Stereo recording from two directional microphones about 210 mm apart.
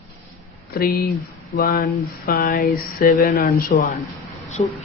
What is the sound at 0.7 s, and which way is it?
Speech, 45° left (ahead or behind).